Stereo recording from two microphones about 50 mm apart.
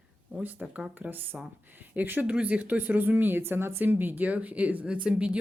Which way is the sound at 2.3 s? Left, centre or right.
Right.